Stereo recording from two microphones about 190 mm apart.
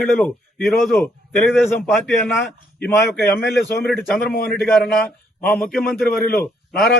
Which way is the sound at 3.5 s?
60° left (ahead or behind).